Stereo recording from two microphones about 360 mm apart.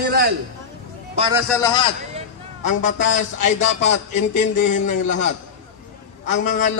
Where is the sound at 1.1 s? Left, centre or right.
Centre.